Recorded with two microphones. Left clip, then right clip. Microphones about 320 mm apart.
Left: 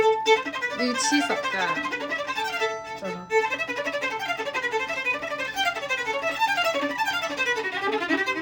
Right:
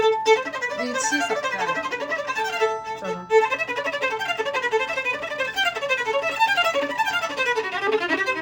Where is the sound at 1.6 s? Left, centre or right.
Centre.